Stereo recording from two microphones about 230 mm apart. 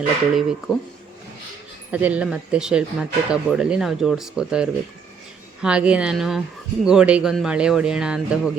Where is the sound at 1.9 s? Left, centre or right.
Centre.